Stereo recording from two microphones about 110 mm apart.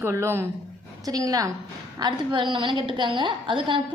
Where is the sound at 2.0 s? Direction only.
45° right (ahead or behind).